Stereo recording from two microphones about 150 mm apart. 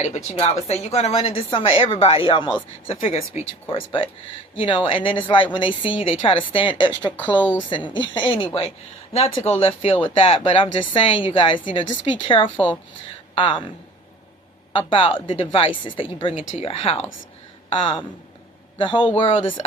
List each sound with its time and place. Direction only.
0.0 s speech: 45° left (ahead or behind)
7.2 s speech: 10° left (ahead or behind)
7.9 s speech: 35° left (ahead or behind)
14.7 s speech: 35° left (ahead or behind)